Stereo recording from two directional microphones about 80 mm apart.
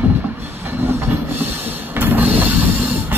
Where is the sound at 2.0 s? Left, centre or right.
Right.